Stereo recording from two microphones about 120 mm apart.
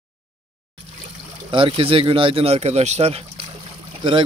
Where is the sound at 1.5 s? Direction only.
45° right (ahead or behind).